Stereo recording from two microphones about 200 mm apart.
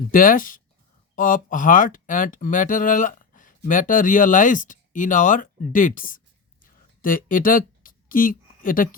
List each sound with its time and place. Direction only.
0.1 s speech: 45° left (ahead or behind)